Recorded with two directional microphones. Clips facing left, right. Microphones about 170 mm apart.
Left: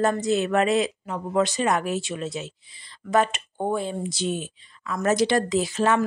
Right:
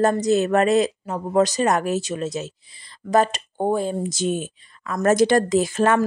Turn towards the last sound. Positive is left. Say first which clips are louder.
# right 4 dB
turn(degrees=-50)  # may be behind; listen again after turning